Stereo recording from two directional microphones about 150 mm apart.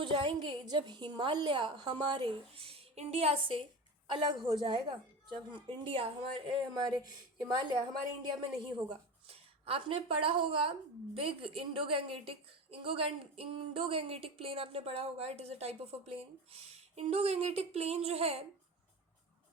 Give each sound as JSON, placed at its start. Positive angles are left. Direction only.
{"t": 0.0, "sound": "a woman's voice", "side_deg": -35}
{"t": 8.9, "sound": "a woman's voice", "side_deg": -40}